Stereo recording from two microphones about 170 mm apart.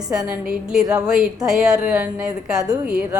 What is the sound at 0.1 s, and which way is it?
Speech, 5° right (ahead or behind).